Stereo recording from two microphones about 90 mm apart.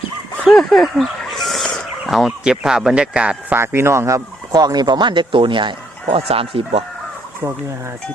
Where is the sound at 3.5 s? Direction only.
25° right (ahead or behind); by 6.8 s 90° right.